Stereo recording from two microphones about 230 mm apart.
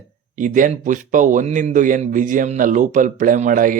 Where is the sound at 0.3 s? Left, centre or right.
Right.